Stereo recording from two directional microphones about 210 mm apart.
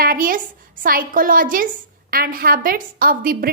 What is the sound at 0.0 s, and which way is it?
A woman's voice, 40° right (ahead or behind).